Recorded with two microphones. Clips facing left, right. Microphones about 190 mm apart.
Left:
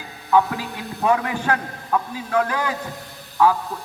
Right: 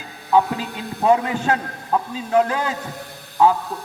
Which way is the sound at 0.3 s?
25° right (ahead or behind).